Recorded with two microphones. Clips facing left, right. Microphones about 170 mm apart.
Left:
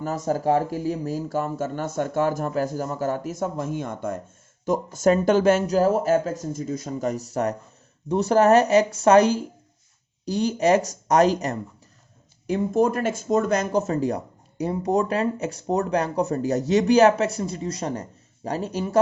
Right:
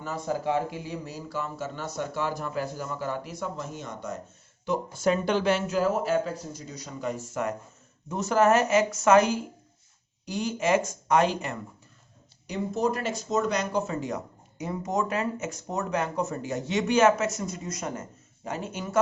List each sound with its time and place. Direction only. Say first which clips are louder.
0.0 s speech: left 6 dB; 45° left (ahead or behind)
12.5 s speech: left 6 dB; 50° left (ahead or behind); by 18.9 s 35° left (ahead or behind)